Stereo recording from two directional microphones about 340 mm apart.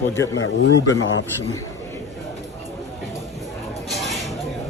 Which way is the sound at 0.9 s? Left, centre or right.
Left.